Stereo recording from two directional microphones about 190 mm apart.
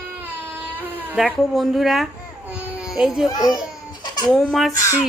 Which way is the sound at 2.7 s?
5° right (ahead or behind).